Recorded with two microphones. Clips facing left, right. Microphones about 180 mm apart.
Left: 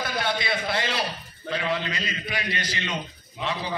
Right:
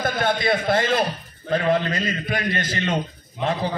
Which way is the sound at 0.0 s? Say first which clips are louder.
Right 6 dB; 50° right (ahead or behind).